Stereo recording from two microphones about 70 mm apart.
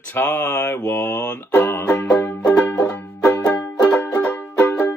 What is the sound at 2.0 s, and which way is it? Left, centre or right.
Music, centre.